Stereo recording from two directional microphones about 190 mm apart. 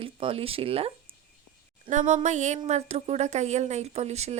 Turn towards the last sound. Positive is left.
turn(degrees=-35)  # may be behind; listen again after turning